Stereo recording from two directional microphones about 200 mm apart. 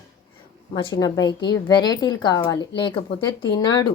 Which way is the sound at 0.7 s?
20° left (ahead or behind).